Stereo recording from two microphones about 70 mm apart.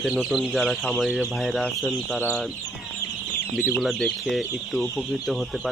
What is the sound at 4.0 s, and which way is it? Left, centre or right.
Speech, centre.